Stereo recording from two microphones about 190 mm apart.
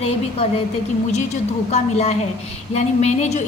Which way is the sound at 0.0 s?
30° left (ahead or behind).